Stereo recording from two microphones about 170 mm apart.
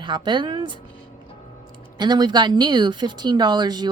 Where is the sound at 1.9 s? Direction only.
25° right (ahead or behind).